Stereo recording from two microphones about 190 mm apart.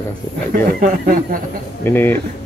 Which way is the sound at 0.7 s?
50° right (ahead or behind).